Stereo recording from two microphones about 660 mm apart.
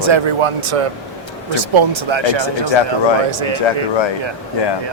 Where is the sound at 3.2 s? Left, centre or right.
Right.